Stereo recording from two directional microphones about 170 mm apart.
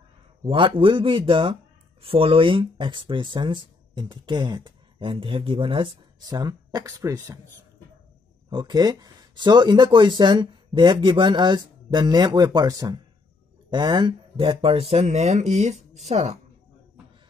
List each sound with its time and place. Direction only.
0.4 s speech: 30° right (ahead or behind)
8.5 s speech: 25° right (ahead or behind)